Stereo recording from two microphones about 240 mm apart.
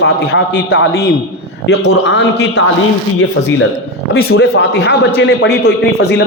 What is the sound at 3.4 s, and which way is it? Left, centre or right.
Speech, left.